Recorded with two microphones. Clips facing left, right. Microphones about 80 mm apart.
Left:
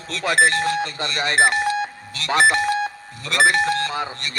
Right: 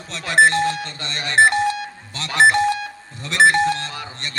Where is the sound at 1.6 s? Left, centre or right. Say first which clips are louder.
Left 1 dB; left.